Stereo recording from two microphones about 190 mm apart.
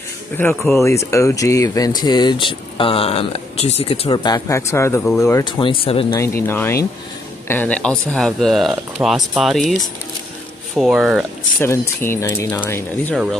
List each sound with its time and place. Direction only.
0.6 s speech: centre (ahead or behind)
0.8 s speech: 15° left (ahead or behind)
5.0 s speech: centre (ahead or behind)
5.3 s speech: 25° left (ahead or behind)
6.1 s speech: 15° left (ahead or behind)
10.8 s speech: 5° right (ahead or behind)
11.6 s speech: 15° left (ahead or behind)